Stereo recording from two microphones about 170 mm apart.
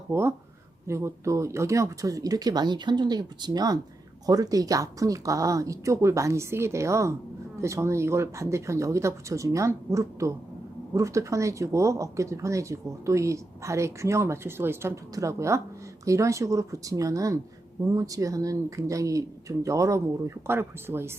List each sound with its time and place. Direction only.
0.1 s speech: 15° right (ahead or behind)